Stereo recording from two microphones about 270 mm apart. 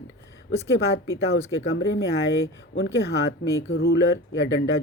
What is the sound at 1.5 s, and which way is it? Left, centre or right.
Speech, left.